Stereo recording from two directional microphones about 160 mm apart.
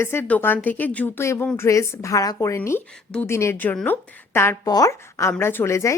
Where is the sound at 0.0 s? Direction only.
15° left (ahead or behind).